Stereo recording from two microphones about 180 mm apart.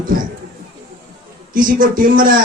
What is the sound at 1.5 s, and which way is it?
Speech, 50° right (ahead or behind).